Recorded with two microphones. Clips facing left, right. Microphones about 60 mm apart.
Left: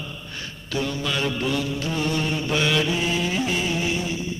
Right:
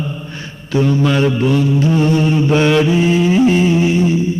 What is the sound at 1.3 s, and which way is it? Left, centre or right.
Mantra, right.